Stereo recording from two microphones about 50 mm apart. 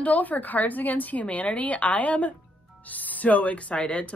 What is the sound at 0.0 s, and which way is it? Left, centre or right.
A woman's voice, left.